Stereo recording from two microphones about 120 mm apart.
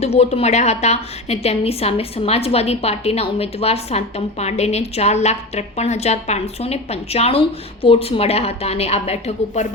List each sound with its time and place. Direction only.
0.0 s a woman's voice: 60° left (ahead or behind)